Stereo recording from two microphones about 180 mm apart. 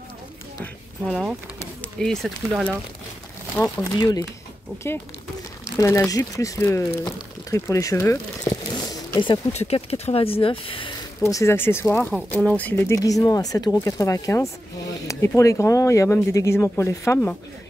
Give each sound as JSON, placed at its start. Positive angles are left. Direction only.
{"t": 1.0, "sound": "speech", "side_deg": 5}
{"t": 3.5, "sound": "speech", "side_deg": 20}
{"t": 5.8, "sound": "speech", "side_deg": 15}
{"t": 9.2, "sound": "speech", "side_deg": 35}